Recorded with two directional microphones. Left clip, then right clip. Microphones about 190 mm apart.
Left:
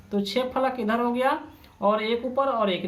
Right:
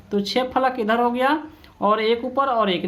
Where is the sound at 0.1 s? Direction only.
30° right (ahead or behind).